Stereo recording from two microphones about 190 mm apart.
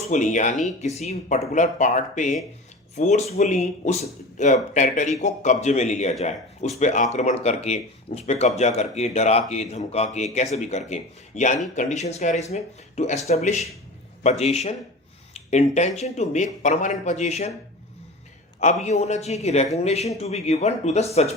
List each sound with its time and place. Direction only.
0.1 s speech: 40° left (ahead or behind)
18.6 s speech: 40° left (ahead or behind)